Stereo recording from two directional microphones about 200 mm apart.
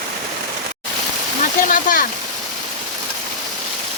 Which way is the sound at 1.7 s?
40° left (ahead or behind).